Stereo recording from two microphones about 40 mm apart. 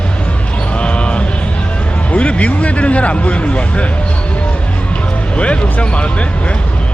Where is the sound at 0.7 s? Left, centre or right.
Left.